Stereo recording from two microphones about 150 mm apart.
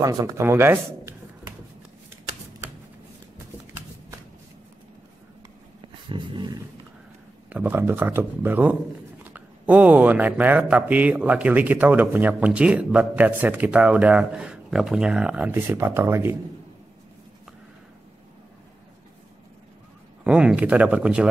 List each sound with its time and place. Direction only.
0.0 s speech: 20° right (ahead or behind)
5.8 s dog: 35° right (ahead or behind)
7.4 s speech: 10° right (ahead or behind)
20.2 s speech: 5° right (ahead or behind)